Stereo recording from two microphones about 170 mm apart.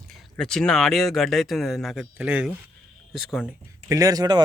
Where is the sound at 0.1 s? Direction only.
5° left (ahead or behind).